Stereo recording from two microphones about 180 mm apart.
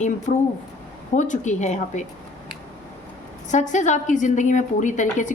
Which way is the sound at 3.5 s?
40° left (ahead or behind).